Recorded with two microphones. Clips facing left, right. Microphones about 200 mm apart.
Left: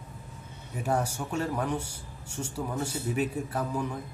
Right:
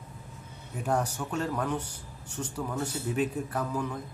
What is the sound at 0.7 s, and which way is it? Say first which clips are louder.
A man's voice: even; 10° left (ahead or behind).